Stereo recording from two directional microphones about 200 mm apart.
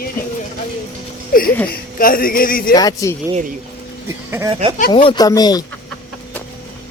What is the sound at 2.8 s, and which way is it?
Speech, 20° left (ahead or behind).